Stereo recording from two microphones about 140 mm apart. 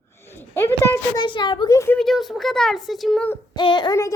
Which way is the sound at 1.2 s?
35° left (ahead or behind).